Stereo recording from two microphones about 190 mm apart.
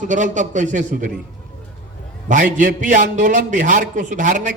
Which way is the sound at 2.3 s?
40° right (ahead or behind).